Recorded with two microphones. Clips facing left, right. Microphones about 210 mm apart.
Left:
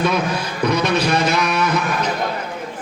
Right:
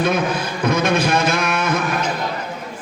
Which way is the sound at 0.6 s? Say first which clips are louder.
Even; 50° right (ahead or behind).